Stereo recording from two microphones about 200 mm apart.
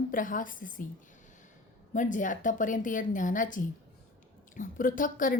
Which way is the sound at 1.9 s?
40° left (ahead or behind).